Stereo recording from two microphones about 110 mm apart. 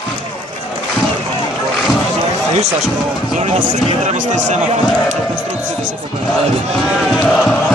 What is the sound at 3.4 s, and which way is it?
Speech, 90° right.